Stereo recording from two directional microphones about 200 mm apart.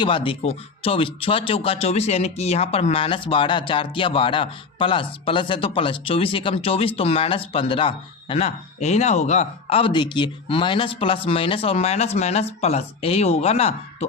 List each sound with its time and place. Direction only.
0.0 s speech: 25° left (ahead or behind)